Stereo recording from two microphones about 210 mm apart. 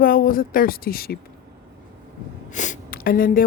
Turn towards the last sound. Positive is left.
turn(degrees=45)  # may be behind; listen again after turning